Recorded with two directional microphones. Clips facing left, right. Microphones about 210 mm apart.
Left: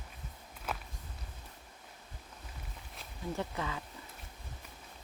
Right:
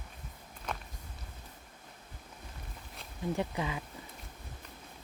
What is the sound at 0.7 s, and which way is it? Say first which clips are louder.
Walk: even; 5° left (ahead or behind).